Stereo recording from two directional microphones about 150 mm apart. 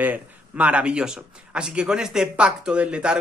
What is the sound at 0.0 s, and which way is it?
Speech, 10° right (ahead or behind).